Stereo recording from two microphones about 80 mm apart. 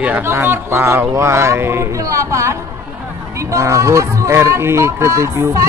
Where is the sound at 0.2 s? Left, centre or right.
Right.